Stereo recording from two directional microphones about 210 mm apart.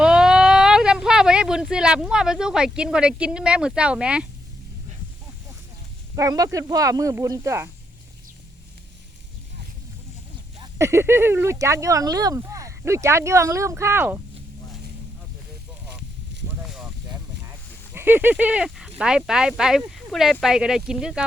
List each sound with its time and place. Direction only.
0.0 s speech: 5° right (ahead or behind)
6.1 s speech: 15° right (ahead or behind)
10.6 s speech: 15° right (ahead or behind)
16.6 s a sound: centre (ahead or behind)
17.9 s speech: 10° right (ahead or behind)